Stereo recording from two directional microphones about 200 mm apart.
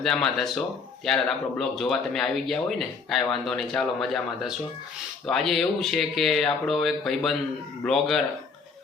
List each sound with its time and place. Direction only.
0.0 s speech: centre (ahead or behind)